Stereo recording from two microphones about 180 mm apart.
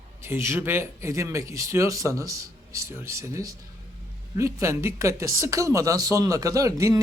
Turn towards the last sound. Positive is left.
turn(degrees=-15)  # may be behind; listen again after turning